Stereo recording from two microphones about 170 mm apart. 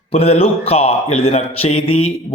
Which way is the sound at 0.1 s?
35° left (ahead or behind).